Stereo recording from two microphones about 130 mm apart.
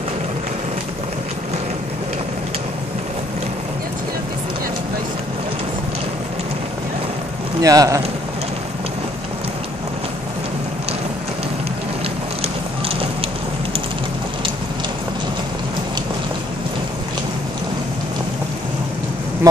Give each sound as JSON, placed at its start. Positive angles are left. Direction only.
{"t": 7.6, "sound": "speech", "side_deg": -25}
{"t": 19.4, "sound": "speech", "side_deg": -25}